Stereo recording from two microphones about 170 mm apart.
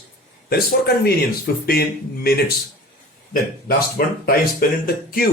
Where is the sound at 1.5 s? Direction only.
70° left (ahead or behind).